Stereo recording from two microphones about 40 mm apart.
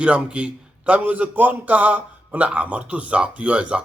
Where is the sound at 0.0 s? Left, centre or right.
Right.